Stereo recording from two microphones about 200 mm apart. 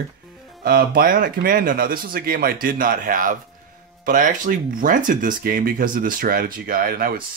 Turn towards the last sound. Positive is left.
turn(degrees=-50)  # may be behind; listen again after turning